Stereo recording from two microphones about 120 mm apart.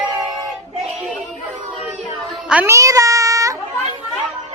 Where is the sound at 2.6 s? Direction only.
25° right (ahead or behind).